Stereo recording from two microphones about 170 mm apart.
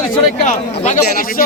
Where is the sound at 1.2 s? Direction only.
55° left (ahead or behind).